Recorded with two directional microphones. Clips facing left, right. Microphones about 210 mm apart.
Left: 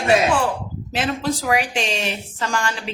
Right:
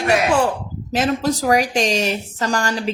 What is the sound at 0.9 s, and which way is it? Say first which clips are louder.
Speech: right 4 dB; 40° right (ahead or behind).